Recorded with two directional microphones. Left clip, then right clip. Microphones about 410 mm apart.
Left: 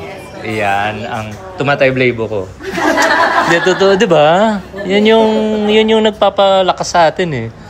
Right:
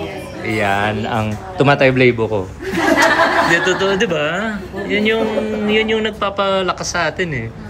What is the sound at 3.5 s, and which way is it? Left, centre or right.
A man's voice, centre.